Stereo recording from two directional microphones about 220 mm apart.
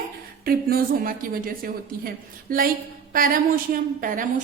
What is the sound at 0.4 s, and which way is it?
A woman's voice, 40° right (ahead or behind).